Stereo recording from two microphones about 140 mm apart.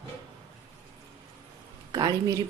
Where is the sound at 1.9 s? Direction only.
30° right (ahead or behind).